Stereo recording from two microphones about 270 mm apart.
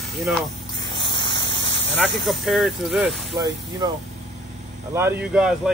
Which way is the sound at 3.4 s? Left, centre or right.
Centre.